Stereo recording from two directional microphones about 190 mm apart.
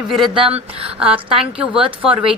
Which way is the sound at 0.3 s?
30° right (ahead or behind).